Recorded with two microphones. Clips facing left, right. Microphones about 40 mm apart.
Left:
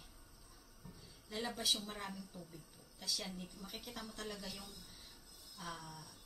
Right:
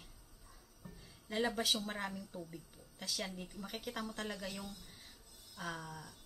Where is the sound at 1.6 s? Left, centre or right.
Centre.